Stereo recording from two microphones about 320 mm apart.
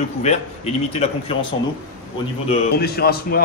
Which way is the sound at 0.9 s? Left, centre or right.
Centre.